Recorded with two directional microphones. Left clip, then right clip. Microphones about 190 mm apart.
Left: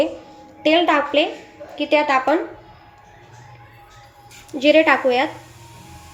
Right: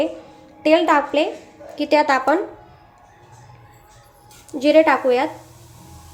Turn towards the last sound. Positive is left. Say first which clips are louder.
# even
turn(degrees=0)  # may be behind; listen again after turning